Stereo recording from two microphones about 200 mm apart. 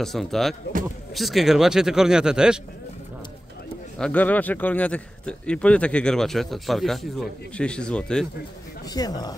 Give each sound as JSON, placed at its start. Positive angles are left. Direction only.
{"t": 0.0, "sound": "speech", "side_deg": 0}
{"t": 4.0, "sound": "speech", "side_deg": 10}
{"t": 8.9, "sound": "speech", "side_deg": 20}